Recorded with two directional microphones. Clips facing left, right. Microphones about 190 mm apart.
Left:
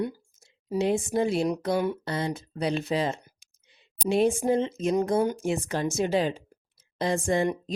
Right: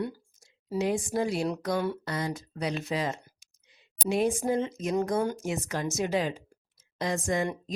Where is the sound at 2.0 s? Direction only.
30° left (ahead or behind).